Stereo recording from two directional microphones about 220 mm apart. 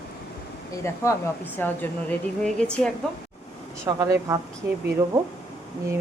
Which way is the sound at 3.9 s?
15° right (ahead or behind).